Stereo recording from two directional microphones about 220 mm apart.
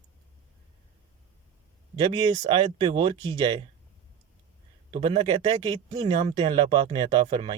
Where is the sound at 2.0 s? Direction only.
20° right (ahead or behind).